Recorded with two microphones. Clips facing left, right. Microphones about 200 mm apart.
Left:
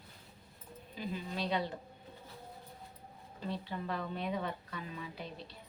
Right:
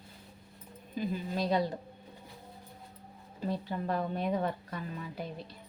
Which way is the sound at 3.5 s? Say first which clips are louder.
Right 5 dB; 45° right (ahead or behind).